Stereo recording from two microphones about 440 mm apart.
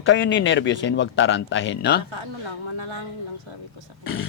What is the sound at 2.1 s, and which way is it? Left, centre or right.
Speech, right.